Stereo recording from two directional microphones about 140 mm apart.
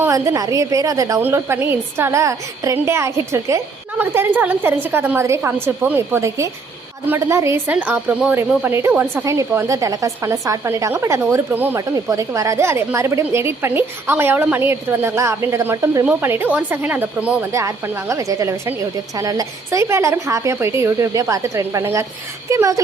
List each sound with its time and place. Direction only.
0.0 s a woman's voice: 20° right (ahead or behind)
17.5 s a woman's voice: 20° right (ahead or behind)